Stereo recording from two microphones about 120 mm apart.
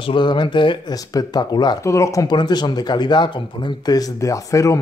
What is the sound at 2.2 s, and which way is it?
A man's voice, 35° left (ahead or behind).